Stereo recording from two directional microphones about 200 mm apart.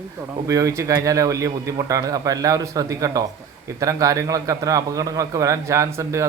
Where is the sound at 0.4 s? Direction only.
15° right (ahead or behind).